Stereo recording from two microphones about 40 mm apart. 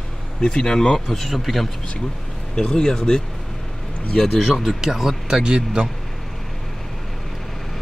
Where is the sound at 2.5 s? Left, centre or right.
Centre.